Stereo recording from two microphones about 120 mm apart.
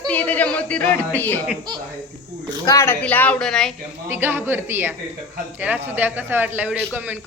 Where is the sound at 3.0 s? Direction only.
15° left (ahead or behind).